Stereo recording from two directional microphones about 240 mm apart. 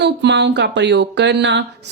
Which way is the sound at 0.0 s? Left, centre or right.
Right.